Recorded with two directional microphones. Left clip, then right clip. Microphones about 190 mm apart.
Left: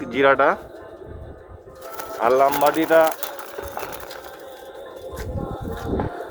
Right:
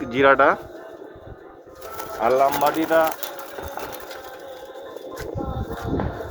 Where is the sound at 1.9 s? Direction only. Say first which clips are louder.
Left 1 dB; 25° left (ahead or behind).